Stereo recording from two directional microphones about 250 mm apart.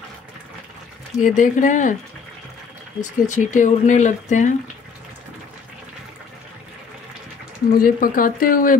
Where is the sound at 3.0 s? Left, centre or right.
Left.